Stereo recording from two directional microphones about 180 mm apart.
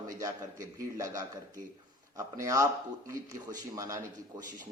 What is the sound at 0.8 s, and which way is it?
Speech, 15° right (ahead or behind).